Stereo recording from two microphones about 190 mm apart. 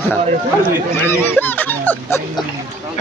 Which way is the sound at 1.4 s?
10° left (ahead or behind).